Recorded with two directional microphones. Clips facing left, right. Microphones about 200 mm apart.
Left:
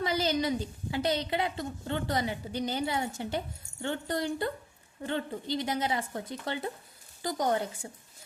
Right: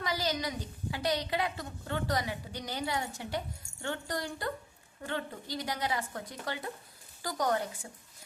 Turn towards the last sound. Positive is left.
turn(degrees=25)  # may be behind; listen again after turning